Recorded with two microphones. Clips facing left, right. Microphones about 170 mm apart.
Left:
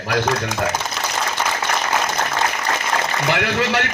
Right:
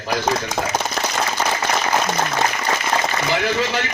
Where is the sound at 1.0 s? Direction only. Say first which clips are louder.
Right 3 dB; 50° right (ahead or behind).